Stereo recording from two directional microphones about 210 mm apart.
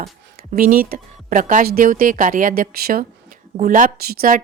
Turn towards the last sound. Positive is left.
turn(degrees=-40)  # may be behind; listen again after turning